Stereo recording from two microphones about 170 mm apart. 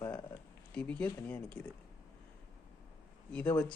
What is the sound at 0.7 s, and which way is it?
Speech, 5° left (ahead or behind).